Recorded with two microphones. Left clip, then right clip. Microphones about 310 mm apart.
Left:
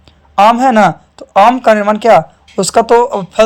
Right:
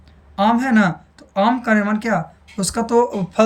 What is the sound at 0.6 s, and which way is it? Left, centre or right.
Speech, left.